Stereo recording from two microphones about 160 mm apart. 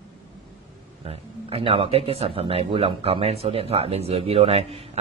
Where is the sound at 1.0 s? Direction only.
35° right (ahead or behind).